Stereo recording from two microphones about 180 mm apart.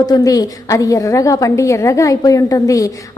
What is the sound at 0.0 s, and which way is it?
A woman's voice, 20° left (ahead or behind).